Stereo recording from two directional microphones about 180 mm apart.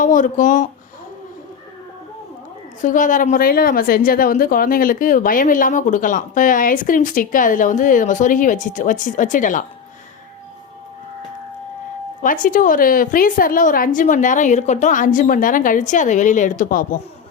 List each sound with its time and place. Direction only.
0.0 s speech: 45° left (ahead or behind)
2.8 s a woman's voice: 45° left (ahead or behind)
12.2 s a woman's voice: 50° left (ahead or behind)